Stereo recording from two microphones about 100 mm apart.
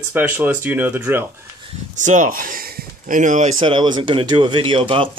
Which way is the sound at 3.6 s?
55° right (ahead or behind).